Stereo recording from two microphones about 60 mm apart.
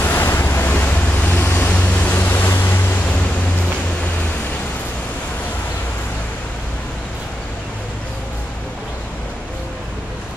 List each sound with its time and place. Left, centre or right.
0.0 s waves: left